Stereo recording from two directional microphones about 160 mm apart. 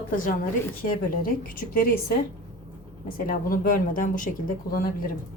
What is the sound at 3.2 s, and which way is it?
Speech, 60° left (ahead or behind).